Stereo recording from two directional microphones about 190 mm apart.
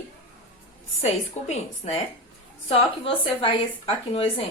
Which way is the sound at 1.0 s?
35° left (ahead or behind).